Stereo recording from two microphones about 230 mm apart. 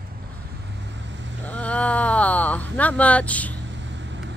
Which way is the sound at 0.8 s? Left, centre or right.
Right.